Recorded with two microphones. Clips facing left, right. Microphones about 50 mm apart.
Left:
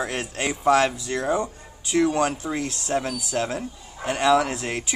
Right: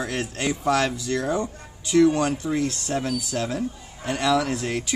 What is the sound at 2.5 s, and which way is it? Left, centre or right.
A man's voice, left.